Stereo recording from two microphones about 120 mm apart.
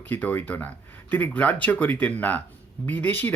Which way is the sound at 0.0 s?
15° left (ahead or behind).